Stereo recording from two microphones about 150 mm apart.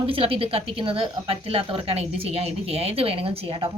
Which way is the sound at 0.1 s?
40° right (ahead or behind).